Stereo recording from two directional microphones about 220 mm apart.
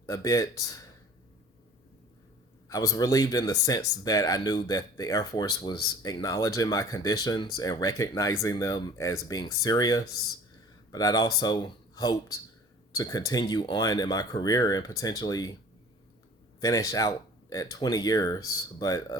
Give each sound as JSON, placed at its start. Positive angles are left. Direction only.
{"t": 0.0, "sound": "speech", "side_deg": 15}
{"t": 2.6, "sound": "speech", "side_deg": 15}
{"t": 16.6, "sound": "speech", "side_deg": 15}